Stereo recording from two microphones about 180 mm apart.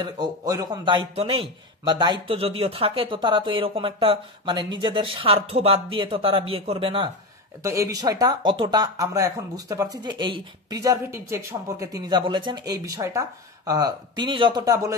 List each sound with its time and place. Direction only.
0.0 s a man's voice: 20° right (ahead or behind)
7.6 s a man's voice: 15° right (ahead or behind)